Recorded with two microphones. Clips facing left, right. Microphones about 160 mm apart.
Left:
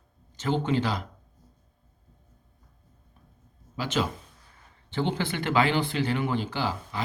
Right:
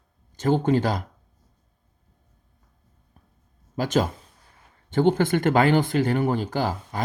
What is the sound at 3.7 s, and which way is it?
Speech, 45° right (ahead or behind).